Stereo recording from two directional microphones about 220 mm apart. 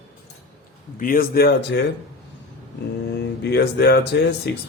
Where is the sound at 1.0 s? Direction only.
40° left (ahead or behind).